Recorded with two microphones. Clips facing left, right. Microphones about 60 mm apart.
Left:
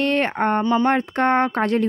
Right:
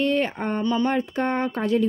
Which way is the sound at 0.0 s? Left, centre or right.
Left.